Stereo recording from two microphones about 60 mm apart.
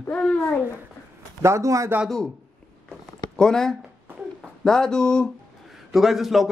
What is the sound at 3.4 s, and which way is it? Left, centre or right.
Speech, centre.